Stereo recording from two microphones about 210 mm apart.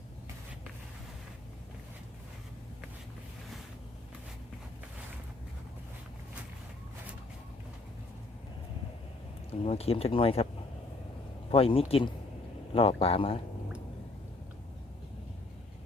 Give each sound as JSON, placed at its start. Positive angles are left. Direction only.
{"t": 9.5, "sound": "speech", "side_deg": 30}
{"t": 11.5, "sound": "speech", "side_deg": 25}